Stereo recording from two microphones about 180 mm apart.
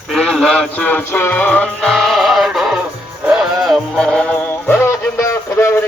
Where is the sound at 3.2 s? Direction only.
5° right (ahead or behind).